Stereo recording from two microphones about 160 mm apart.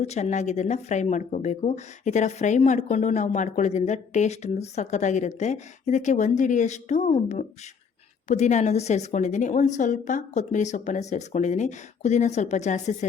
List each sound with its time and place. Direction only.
0.0 s speech: 45° left (ahead or behind)